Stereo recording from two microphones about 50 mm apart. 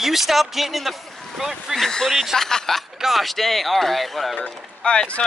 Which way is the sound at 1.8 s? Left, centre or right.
Centre.